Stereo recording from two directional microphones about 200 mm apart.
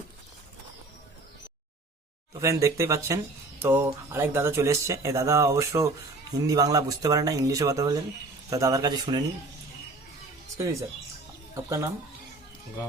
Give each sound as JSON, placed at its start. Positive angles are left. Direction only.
{"t": 2.4, "sound": "a man's voice", "side_deg": -15}
{"t": 11.5, "sound": "speech", "side_deg": -15}